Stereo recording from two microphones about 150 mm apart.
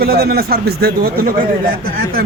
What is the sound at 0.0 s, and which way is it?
Speech, 90° right.